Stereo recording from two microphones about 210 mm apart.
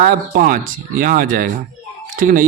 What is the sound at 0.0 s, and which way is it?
Speech, 40° right (ahead or behind).